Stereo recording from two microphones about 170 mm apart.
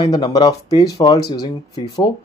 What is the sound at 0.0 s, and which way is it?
Speech, 25° left (ahead or behind).